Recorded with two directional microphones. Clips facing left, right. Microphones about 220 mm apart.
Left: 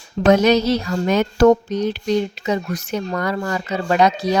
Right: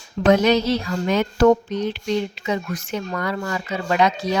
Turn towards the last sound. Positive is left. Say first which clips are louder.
# left 3 dB
turn(degrees=40)  # may be behind; listen again after turning